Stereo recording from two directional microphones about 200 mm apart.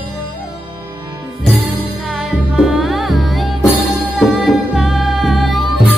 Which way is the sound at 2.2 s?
Centre (ahead or behind).